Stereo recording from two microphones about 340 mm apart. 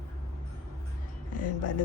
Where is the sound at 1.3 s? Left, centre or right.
Left.